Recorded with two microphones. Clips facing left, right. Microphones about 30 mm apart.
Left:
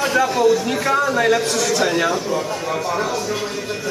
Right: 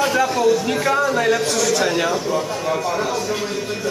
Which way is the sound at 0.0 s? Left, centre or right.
Centre.